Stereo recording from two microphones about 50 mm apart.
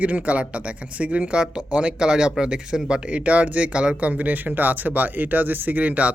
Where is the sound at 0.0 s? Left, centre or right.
Right.